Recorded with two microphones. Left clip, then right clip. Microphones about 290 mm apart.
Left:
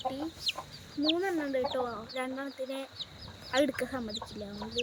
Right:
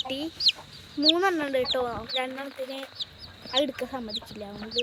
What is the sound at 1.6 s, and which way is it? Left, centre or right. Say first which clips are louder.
Speech: right 5 dB; centre.